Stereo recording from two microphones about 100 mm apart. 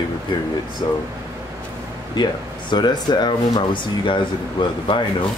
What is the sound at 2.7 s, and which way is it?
Speech, 45° left (ahead or behind).